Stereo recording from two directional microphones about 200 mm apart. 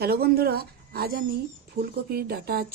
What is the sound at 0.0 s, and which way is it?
Speech, 50° right (ahead or behind).